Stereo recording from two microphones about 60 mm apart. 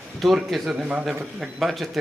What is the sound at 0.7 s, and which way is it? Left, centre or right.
Speech, centre.